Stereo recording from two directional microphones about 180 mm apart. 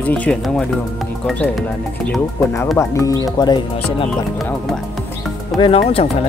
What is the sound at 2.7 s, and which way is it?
Speech, 15° left (ahead or behind).